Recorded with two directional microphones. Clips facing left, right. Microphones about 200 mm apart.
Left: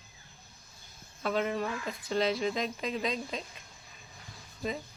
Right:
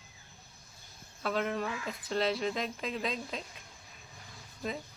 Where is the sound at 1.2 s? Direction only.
Centre (ahead or behind).